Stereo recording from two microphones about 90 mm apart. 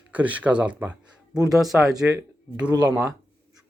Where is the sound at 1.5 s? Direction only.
Centre (ahead or behind).